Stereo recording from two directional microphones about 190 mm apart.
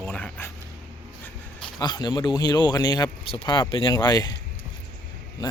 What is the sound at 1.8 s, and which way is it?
Speech, 20° left (ahead or behind).